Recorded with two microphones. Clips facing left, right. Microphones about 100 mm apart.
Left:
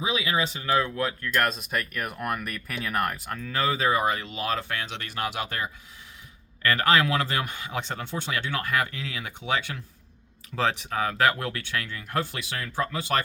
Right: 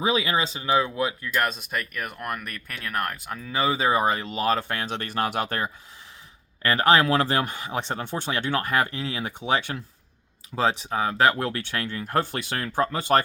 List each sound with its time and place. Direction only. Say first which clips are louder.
0.0 s speech: right 3 dB; 35° right (ahead or behind)
6.6 s speech: right 3 dB; 30° right (ahead or behind)
7.9 s speech: right 3 dB; 45° right (ahead or behind)
10.5 s speech: right 2 dB; 20° right (ahead or behind); by 13.2 s 45° right (ahead or behind)